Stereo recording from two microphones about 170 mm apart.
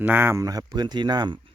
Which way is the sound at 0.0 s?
10° right (ahead or behind).